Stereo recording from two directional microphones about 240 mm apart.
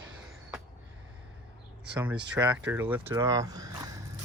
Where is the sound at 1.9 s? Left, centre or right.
Centre.